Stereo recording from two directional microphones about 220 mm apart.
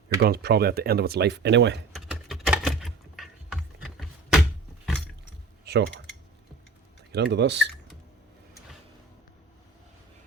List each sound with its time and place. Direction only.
0.2 s speech: 45° right (ahead or behind)
1.9 s typing: centre (ahead or behind)
5.6 s speech: 50° right (ahead or behind)
7.1 s speech: 50° right (ahead or behind)